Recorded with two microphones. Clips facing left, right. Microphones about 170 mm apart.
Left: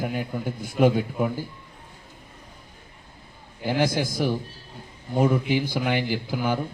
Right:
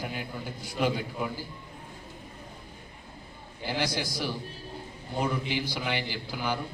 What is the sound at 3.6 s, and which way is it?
A man's voice, 50° left (ahead or behind).